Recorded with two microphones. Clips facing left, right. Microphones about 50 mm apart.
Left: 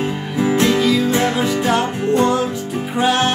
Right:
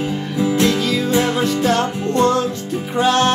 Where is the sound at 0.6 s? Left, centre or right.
Centre.